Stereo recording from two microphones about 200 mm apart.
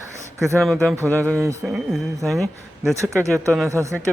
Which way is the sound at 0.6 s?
Centre (ahead or behind).